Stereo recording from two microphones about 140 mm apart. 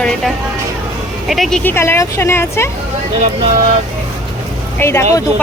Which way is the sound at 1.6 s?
15° left (ahead or behind).